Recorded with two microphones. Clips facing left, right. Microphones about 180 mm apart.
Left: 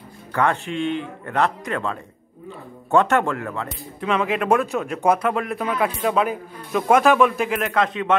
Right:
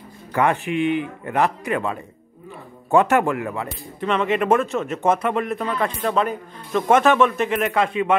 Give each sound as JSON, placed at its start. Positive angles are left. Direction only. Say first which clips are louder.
{"t": 0.3, "sound": "a man's voice", "louder": "right 2 dB", "side_deg": -15}
{"t": 4.0, "sound": "speech", "louder": "right 1 dB", "side_deg": 0}